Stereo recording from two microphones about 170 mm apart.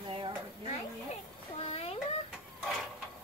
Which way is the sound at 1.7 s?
35° left (ahead or behind).